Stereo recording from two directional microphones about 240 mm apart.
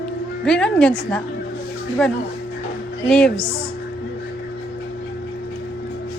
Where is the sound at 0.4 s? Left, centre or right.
Centre.